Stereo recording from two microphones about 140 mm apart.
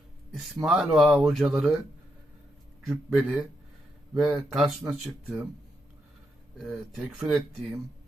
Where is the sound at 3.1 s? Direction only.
15° right (ahead or behind).